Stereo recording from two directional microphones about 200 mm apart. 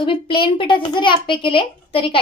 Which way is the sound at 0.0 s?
25° left (ahead or behind).